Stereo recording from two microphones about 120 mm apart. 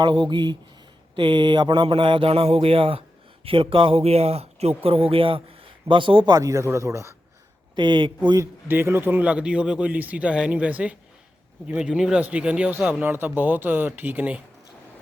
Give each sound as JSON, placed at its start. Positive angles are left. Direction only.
{"t": 0.0, "sound": "speech", "side_deg": -40}
{"t": 7.8, "sound": "speech", "side_deg": -40}
{"t": 8.4, "sound": "speech", "side_deg": -20}